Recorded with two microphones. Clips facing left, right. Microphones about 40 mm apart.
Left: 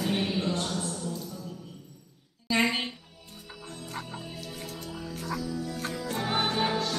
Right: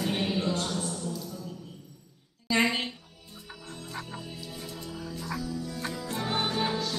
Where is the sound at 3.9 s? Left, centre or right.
Centre.